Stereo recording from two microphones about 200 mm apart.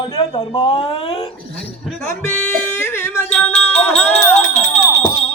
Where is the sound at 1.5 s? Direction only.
Centre (ahead or behind).